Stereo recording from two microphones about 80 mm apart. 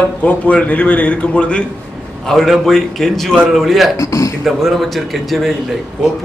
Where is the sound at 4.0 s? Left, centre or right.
Left.